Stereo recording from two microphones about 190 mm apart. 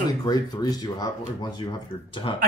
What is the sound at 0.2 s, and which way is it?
Speech, 20° left (ahead or behind).